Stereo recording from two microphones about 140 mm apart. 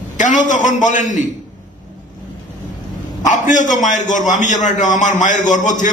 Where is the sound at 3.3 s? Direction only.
60° left (ahead or behind).